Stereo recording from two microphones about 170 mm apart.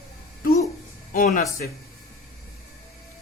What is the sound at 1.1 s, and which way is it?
Speech, 50° left (ahead or behind).